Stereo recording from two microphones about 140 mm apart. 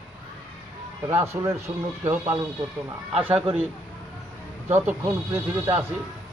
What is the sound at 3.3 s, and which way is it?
Speech, 40° right (ahead or behind).